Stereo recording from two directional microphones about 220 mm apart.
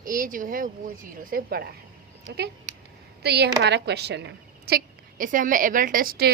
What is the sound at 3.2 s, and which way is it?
Speech, 50° right (ahead or behind).